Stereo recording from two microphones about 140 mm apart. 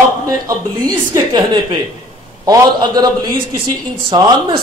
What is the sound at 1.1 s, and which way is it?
A man's voice, 35° right (ahead or behind).